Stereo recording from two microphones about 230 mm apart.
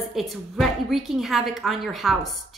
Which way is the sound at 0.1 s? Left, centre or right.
Centre.